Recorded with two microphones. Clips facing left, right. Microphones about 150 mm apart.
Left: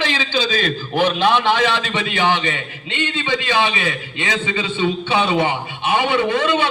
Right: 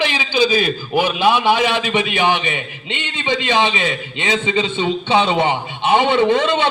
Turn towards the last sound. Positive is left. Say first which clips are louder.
# right 3 dB
turn(degrees=-25)  # may be behind; listen again after turning